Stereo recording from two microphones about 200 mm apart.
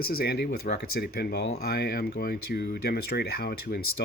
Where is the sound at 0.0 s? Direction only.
50° left (ahead or behind).